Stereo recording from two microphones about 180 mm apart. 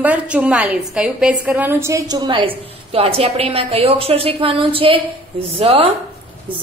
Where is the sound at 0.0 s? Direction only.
10° right (ahead or behind).